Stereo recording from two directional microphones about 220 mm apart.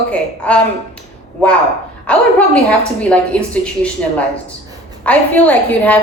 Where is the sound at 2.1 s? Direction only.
5° left (ahead or behind).